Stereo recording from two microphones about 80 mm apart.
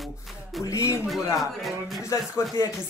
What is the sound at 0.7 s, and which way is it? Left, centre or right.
Speech, left.